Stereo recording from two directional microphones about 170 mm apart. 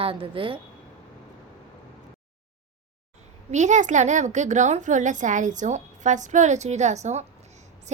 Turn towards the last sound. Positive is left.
turn(degrees=-40)  # may be behind; listen again after turning